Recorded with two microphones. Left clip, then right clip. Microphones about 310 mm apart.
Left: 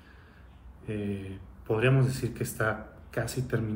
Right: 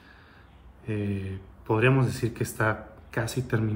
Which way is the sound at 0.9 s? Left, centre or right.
Centre.